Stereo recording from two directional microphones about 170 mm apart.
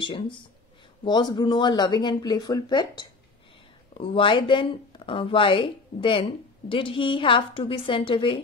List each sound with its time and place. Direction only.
0.0 s speech: 30° left (ahead or behind)